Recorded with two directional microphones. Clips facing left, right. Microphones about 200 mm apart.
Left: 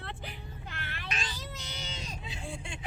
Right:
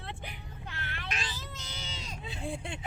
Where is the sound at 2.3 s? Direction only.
60° right (ahead or behind).